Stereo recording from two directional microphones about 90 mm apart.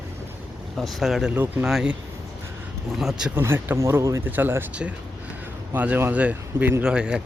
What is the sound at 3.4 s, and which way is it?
Speech, 30° right (ahead or behind).